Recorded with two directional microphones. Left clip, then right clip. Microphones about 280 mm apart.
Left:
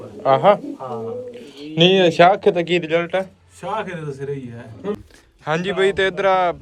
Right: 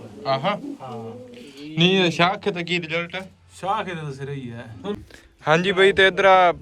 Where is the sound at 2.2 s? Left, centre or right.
Centre.